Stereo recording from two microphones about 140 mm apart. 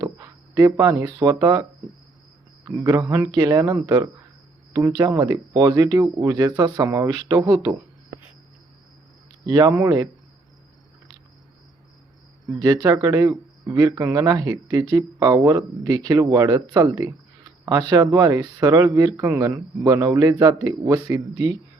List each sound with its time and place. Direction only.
0.0 s speech: 25° right (ahead or behind)
2.6 s speech: 25° right (ahead or behind)
9.5 s speech: 25° right (ahead or behind)
12.5 s speech: 30° right (ahead or behind)